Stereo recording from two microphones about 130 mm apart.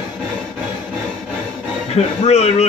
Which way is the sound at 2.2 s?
55° left (ahead or behind).